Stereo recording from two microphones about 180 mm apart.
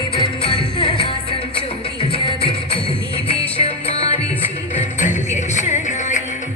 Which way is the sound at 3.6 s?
35° left (ahead or behind).